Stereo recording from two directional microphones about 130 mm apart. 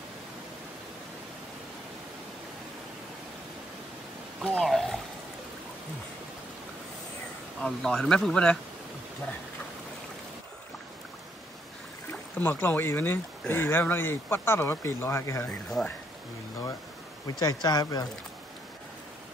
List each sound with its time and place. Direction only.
4.5 s speech: 5° left (ahead or behind)
7.6 s speech: 5° left (ahead or behind)
12.1 s speech: 15° left (ahead or behind)
15.4 s speech: 10° left (ahead or behind)
17.4 s speech: 30° left (ahead or behind)